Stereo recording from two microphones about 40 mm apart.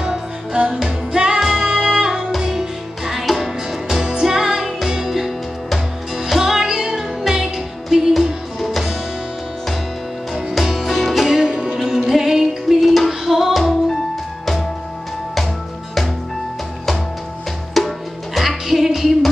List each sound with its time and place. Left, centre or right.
0.0 s music: right; by 4.1 s centre
4.1 s music: centre
10.3 s music: centre
11.2 s music: centre
13.6 s music: centre
17.7 s music: centre